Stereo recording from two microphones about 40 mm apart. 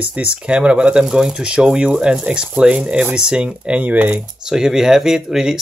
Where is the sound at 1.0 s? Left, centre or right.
Centre; by 4.2 s right.